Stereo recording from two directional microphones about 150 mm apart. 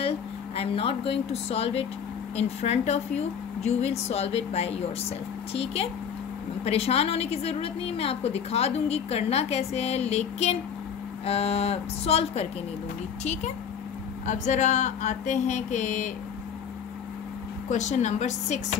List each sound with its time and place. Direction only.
0.6 s a woman's voice: 40° left (ahead or behind)
6.6 s a woman's voice: 45° left (ahead or behind)
17.6 s a woman's voice: 50° left (ahead or behind)